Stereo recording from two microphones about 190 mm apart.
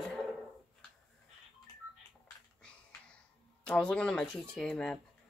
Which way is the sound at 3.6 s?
5° left (ahead or behind).